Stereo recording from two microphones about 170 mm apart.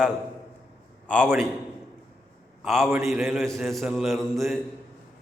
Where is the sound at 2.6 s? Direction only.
Centre (ahead or behind).